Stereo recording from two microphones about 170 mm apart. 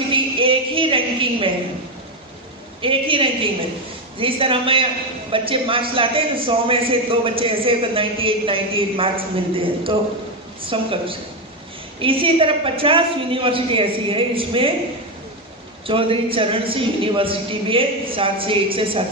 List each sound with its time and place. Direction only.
0.1 s a sound: 30° right (ahead or behind)
2.8 s a man's voice: 30° right (ahead or behind)
15.9 s a man's voice: 30° right (ahead or behind)